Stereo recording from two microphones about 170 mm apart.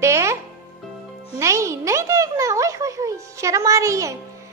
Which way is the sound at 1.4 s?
15° right (ahead or behind).